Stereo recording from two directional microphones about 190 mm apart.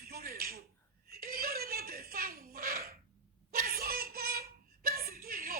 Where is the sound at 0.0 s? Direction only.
50° right (ahead or behind).